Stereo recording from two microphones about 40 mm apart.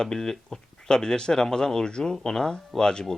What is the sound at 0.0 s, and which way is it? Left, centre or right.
Speech, centre.